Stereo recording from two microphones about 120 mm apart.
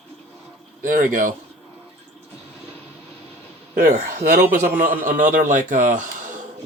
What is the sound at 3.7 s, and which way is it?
A man's voice, 90° right.